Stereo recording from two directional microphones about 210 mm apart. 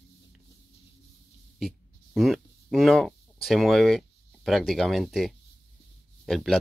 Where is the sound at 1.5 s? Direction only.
Centre (ahead or behind).